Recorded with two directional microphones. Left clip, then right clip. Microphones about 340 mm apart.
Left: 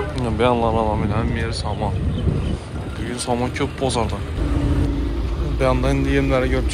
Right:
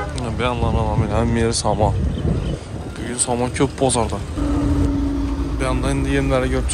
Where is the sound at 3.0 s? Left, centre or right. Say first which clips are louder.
Right 1 dB; centre.